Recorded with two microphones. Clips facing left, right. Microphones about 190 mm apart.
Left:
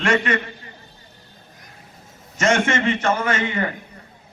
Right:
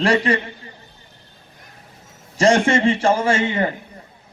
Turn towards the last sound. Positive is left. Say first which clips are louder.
# right 4 dB
turn(degrees=-30)  # may be behind; listen again after turning